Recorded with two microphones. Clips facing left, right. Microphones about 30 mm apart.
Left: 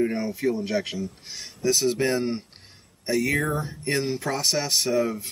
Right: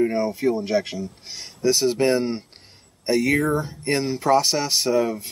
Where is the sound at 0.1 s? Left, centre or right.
Right.